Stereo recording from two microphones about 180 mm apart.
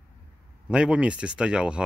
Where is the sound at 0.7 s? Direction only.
5° right (ahead or behind).